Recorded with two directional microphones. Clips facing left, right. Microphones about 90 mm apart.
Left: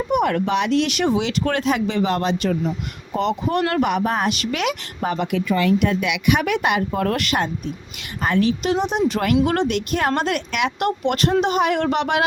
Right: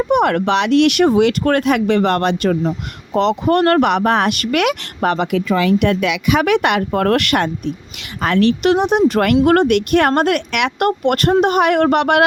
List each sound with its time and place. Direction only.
0.1 s speech: 75° right (ahead or behind)
1.0 s speech: 50° right (ahead or behind)
3.2 s speech: 75° right (ahead or behind)
8.2 s speech: 85° right; by 10.7 s 70° right (ahead or behind)
10.8 s speech: 55° right (ahead or behind)